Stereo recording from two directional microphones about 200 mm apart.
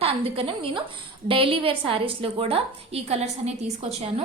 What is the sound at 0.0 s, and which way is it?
A woman's voice, 30° right (ahead or behind).